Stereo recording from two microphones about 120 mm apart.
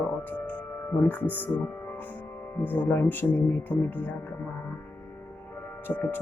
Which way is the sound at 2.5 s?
15° left (ahead or behind).